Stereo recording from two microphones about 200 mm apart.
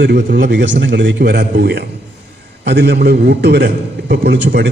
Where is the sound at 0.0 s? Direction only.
55° right (ahead or behind).